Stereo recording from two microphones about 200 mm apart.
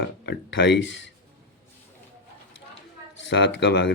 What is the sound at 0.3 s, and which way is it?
Speech, 60° left (ahead or behind).